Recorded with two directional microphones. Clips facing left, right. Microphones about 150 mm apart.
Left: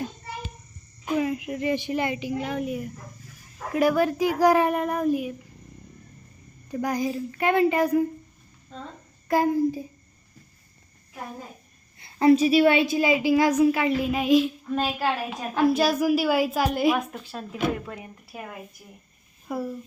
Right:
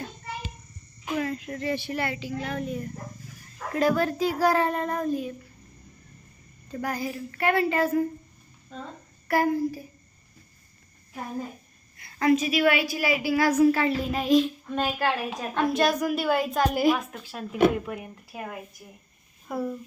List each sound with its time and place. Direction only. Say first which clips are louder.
1.0 s speech: left 4 dB; 15° left (ahead or behind)
6.7 s speech: left 4 dB; 15° left (ahead or behind)
9.2 s speech: left 2 dB; 20° left (ahead or behind)
11.9 s a woman's voice: left 4 dB; 30° left (ahead or behind)
14.1 s a woman's voice: left 1 dB; 5° left (ahead or behind)
17.9 s speech: right 3 dB; 10° right (ahead or behind)
19.5 s a woman's voice: even; centre (ahead or behind)